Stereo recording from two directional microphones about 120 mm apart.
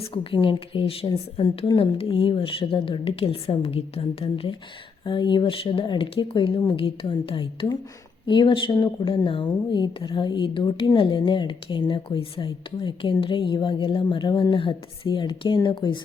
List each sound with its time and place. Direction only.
0.0 s speech: 50° left (ahead or behind)
5.0 s speech: 40° left (ahead or behind)